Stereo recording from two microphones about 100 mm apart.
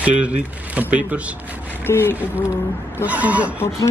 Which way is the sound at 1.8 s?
25° left (ahead or behind).